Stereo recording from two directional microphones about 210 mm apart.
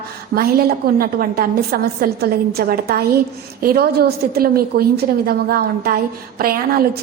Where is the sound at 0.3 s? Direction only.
45° right (ahead or behind).